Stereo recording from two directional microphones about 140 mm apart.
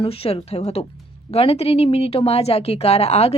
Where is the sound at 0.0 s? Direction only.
45° left (ahead or behind).